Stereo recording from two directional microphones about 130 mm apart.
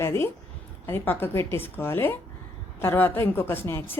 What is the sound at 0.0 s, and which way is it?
Speech, 20° left (ahead or behind).